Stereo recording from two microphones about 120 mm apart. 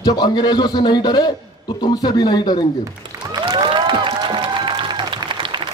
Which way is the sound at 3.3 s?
40° right (ahead or behind).